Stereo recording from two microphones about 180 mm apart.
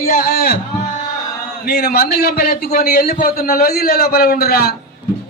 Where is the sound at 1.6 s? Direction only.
55° left (ahead or behind).